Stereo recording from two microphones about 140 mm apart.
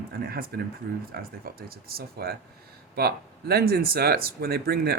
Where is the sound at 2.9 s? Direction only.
90° right.